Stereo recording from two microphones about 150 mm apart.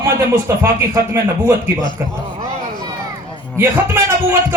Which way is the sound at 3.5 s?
15° right (ahead or behind).